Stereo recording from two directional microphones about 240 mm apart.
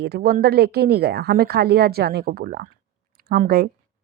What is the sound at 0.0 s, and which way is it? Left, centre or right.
Speech, right.